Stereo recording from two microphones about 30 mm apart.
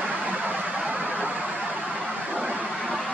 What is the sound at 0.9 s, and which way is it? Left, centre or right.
Vehicle, right.